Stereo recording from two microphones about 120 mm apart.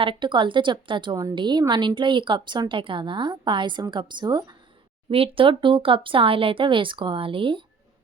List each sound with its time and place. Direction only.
0.0 s a woman's voice: 45° right (ahead or behind)
5.1 s speech: 50° right (ahead or behind)